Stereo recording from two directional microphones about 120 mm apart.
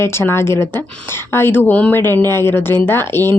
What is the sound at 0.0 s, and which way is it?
Speech, 20° left (ahead or behind).